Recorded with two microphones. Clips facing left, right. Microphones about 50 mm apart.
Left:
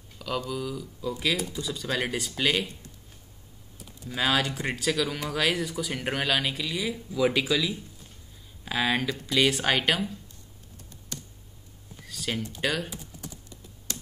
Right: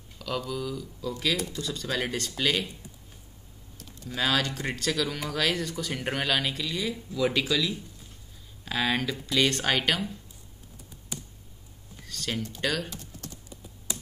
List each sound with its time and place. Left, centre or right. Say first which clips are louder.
0.2 s speech: left 1 dB; centre
3.7 s speech: left 1 dB; centre
11.1 s clicking: right 1 dB; centre
12.0 s typing: left 1 dB; centre
12.5 s speech: left 1 dB; centre